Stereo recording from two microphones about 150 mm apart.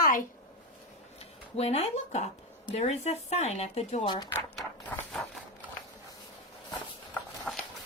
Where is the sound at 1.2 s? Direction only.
45° left (ahead or behind).